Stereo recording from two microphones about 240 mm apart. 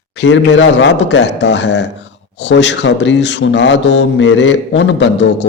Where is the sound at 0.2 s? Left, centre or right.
Left.